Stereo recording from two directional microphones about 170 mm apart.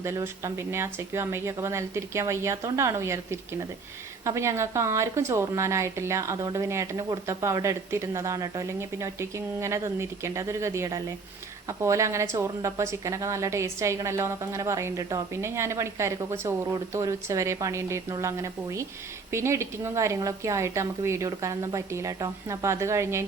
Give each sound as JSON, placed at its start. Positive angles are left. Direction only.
{"t": 0.0, "sound": "a woman's voice", "side_deg": -15}
{"t": 4.3, "sound": "a woman's voice", "side_deg": -15}